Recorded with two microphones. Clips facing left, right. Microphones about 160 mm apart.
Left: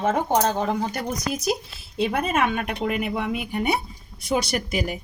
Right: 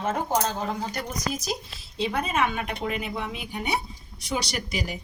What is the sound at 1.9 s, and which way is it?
A woman's voice, 55° left (ahead or behind).